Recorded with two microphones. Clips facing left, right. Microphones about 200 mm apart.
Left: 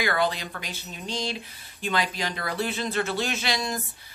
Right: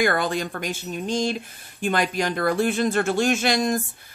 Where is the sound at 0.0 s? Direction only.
50° right (ahead or behind).